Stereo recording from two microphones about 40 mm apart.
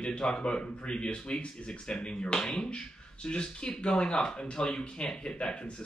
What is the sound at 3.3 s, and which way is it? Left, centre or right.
Speech, left.